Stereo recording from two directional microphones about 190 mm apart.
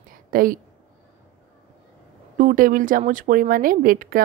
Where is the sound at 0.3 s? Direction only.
50° right (ahead or behind).